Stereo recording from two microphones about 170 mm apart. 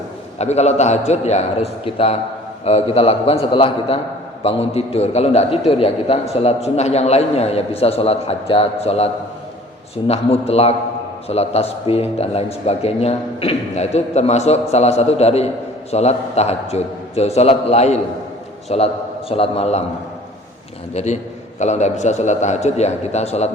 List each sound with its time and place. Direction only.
0.3 s a man's voice: 40° left (ahead or behind)
20.9 s a man's voice: 40° left (ahead or behind)